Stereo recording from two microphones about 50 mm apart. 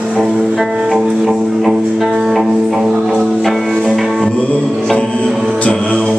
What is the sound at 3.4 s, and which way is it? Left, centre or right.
Music, centre.